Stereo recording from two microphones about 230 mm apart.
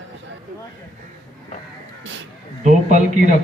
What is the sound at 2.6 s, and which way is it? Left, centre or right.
Speech, right.